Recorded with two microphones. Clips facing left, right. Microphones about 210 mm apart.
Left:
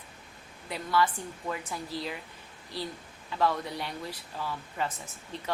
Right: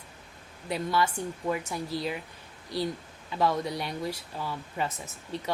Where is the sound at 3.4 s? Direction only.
15° right (ahead or behind).